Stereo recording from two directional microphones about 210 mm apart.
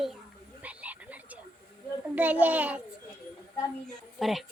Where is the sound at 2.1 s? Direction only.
10° right (ahead or behind).